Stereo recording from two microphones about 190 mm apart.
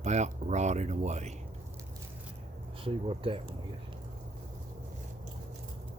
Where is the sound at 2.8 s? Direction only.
30° right (ahead or behind).